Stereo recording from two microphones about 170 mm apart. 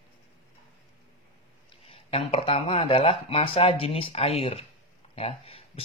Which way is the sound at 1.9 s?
35° left (ahead or behind).